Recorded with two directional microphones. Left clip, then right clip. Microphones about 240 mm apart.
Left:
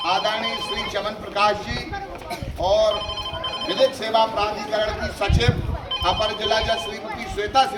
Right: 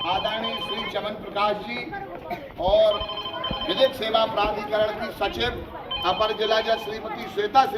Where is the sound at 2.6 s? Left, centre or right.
Centre.